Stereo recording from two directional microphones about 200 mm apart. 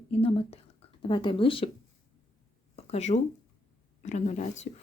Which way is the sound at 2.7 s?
35° left (ahead or behind).